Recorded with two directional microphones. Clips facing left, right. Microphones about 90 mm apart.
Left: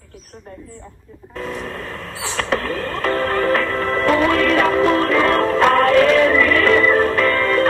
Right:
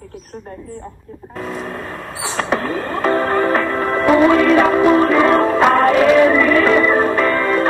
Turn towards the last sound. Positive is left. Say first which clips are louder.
# right 1 dB
turn(degrees=-10)  # may be behind; listen again after turning